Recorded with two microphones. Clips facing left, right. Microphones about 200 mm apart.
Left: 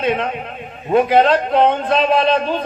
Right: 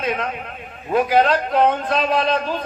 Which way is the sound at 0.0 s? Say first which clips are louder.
Left 5 dB; 30° left (ahead or behind).